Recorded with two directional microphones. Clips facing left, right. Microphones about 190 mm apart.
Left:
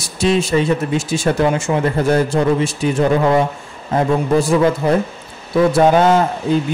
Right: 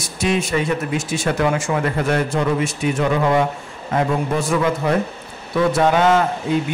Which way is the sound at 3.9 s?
35° left (ahead or behind).